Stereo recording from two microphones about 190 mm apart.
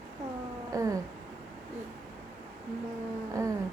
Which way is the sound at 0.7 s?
15° right (ahead or behind).